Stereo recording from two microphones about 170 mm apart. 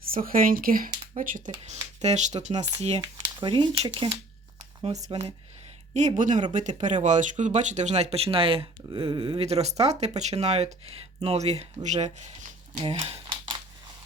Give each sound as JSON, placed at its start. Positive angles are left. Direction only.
{"t": 0.0, "sound": "speech", "side_deg": -55}
{"t": 2.0, "sound": "speech", "side_deg": -40}
{"t": 2.6, "sound": "speech", "side_deg": -25}
{"t": 12.8, "sound": "a sound", "side_deg": -35}